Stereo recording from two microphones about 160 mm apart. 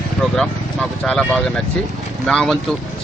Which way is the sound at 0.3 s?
5° left (ahead or behind).